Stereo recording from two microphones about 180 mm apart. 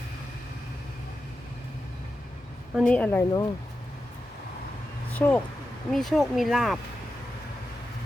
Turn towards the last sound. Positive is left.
turn(degrees=0)  # may be behind; listen again after turning